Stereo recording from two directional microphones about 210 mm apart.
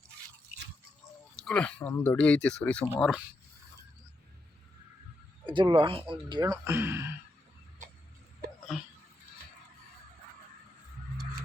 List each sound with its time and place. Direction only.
1.4 s speech: 5° left (ahead or behind)
5.5 s speech: 25° right (ahead or behind)
7.8 s a sound: 35° right (ahead or behind)